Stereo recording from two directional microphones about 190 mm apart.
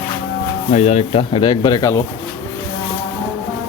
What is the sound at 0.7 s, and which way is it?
Speech, 35° left (ahead or behind).